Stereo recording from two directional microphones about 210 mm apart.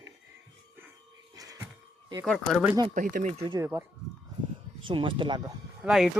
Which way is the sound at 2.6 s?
20° right (ahead or behind).